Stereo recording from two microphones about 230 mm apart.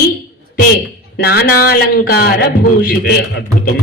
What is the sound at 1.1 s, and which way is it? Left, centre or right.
A man's voice, left.